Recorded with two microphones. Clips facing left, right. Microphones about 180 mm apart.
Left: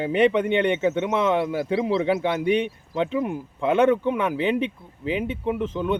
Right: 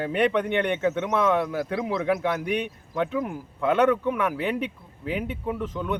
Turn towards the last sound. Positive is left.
turn(degrees=25)  # may be behind; listen again after turning